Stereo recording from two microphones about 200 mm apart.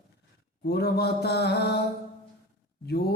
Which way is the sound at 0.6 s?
50° left (ahead or behind).